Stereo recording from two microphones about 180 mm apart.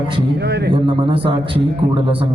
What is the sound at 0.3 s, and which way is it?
Speech, 65° right (ahead or behind).